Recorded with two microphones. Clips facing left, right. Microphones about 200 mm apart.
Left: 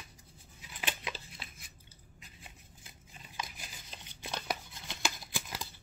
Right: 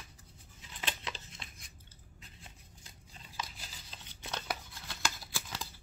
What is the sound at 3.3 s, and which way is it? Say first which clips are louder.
Shuffling cards: left 1 dB; 15° left (ahead or behind).